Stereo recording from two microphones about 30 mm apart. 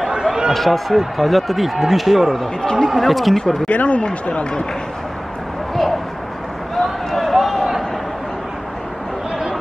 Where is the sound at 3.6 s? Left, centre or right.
Left.